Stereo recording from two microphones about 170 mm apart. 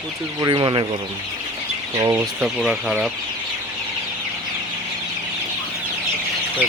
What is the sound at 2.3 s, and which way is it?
Speech, 5° right (ahead or behind).